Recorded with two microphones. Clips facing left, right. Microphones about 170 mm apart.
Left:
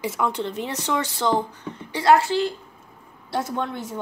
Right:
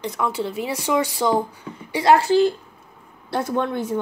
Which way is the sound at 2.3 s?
40° right (ahead or behind).